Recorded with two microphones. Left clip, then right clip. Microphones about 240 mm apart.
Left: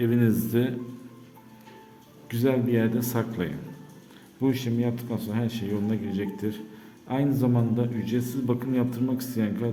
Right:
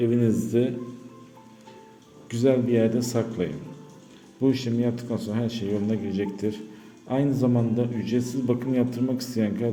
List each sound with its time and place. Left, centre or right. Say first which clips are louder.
0.0 s a man's voice: right 2 dB; centre
2.3 s a man's voice: right 3 dB; centre